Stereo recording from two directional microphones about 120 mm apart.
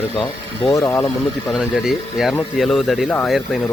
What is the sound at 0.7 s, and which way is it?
Speech, 25° left (ahead or behind).